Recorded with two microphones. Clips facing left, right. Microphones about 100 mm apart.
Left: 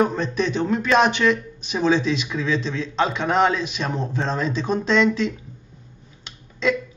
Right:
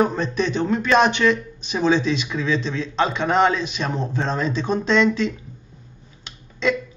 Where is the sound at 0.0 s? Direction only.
Centre (ahead or behind).